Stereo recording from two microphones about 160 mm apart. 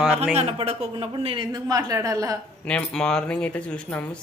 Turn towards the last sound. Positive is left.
turn(degrees=10)  # may be behind; listen again after turning